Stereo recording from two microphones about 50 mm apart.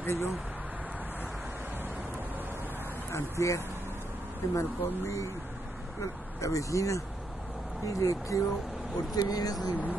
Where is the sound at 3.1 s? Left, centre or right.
Left.